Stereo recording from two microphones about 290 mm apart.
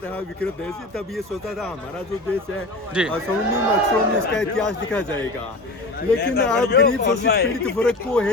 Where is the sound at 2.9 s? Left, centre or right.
Centre.